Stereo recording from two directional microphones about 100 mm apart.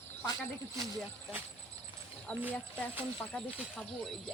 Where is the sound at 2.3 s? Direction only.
10° left (ahead or behind).